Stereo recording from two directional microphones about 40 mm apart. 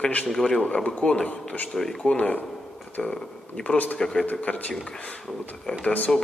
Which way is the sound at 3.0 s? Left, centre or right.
Centre.